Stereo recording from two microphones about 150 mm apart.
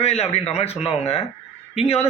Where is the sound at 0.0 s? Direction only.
45° left (ahead or behind).